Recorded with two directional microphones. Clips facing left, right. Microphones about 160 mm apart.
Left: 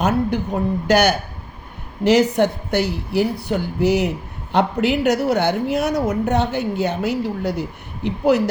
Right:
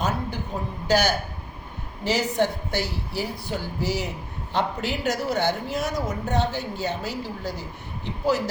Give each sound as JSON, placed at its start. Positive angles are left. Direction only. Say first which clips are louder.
{"t": 0.0, "sound": "a woman's voice", "louder": "left 9 dB", "side_deg": 70}